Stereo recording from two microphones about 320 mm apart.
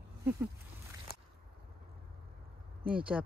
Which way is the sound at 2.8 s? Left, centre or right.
Right.